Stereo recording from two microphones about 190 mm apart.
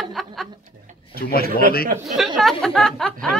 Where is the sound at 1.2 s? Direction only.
55° left (ahead or behind).